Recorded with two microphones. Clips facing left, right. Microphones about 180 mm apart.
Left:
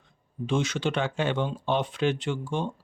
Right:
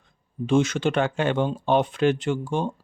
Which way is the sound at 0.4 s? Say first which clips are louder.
Right 6 dB; 50° right (ahead or behind).